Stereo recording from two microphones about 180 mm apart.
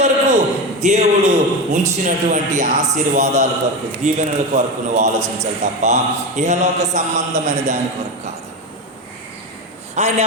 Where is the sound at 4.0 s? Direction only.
40° right (ahead or behind).